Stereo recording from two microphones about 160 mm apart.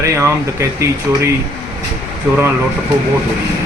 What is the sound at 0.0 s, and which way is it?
Speech, 20° right (ahead or behind).